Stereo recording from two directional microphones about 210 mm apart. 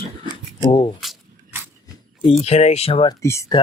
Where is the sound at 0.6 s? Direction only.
20° left (ahead or behind).